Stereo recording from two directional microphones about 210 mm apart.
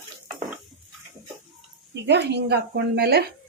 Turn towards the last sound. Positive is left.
turn(degrees=-50)  # may be behind; listen again after turning